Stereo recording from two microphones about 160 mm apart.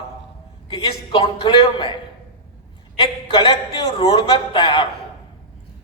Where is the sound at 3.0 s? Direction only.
30° left (ahead or behind).